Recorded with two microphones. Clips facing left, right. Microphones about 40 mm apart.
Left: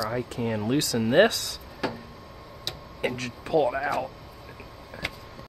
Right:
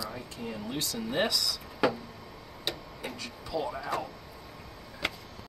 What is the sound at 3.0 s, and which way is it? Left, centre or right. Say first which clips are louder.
Speech: left 11 dB; left.